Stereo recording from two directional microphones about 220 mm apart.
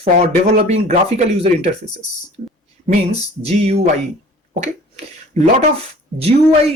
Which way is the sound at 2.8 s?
30° right (ahead or behind).